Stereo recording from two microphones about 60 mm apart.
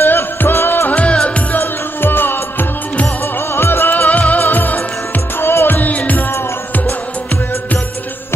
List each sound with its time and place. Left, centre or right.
0.0 s music: left
0.8 s music of bollywood: left
1.5 s music: left
3.5 s music: left
5.4 s music: left
5.8 s music: left